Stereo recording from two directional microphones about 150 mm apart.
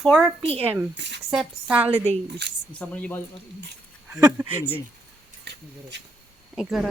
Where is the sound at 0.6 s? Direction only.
15° right (ahead or behind).